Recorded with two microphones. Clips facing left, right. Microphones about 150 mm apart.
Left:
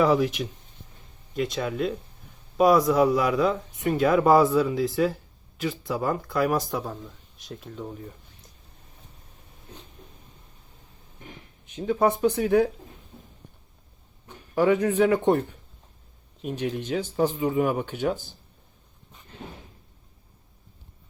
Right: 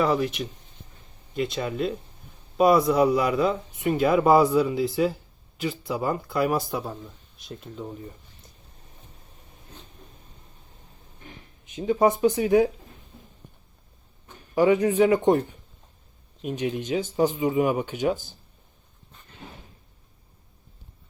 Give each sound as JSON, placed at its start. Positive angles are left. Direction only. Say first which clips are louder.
{"t": 0.0, "sound": "speech", "louder": "left 2 dB", "side_deg": 5}
{"t": 11.7, "sound": "speech", "louder": "right 2 dB", "side_deg": -10}
{"t": 14.5, "sound": "speech", "louder": "right 1 dB", "side_deg": -5}